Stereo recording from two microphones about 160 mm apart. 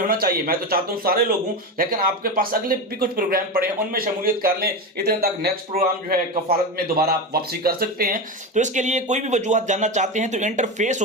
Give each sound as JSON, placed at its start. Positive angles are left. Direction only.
{"t": 0.1, "sound": "a man's voice", "side_deg": -65}